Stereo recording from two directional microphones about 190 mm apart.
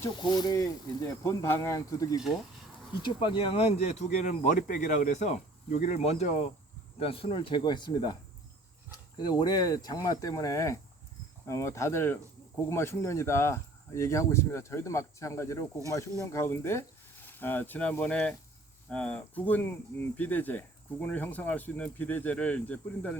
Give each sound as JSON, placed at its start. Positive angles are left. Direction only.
{"t": 0.0, "sound": "speech", "side_deg": 20}
{"t": 9.1, "sound": "speech", "side_deg": 20}